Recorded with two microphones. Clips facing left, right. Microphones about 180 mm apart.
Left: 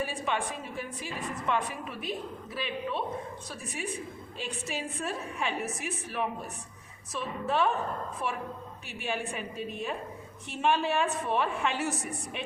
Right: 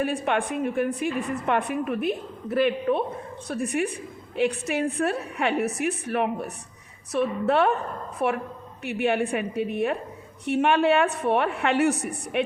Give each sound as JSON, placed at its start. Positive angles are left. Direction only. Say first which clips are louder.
{"t": 0.0, "sound": "a woman's voice", "louder": "right 7 dB", "side_deg": -60}